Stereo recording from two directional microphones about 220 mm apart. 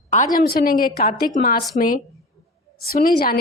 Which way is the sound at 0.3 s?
40° left (ahead or behind).